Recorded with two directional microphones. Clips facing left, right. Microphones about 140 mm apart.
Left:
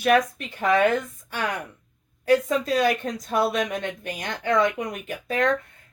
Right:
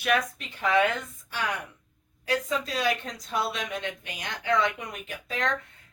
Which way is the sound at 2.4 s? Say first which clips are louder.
Left 6 dB; 50° left (ahead or behind).